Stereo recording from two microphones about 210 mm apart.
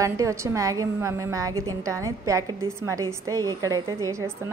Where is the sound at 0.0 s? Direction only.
15° right (ahead or behind).